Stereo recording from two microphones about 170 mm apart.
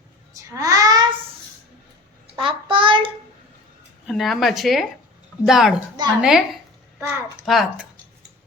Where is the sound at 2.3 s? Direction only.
30° right (ahead or behind).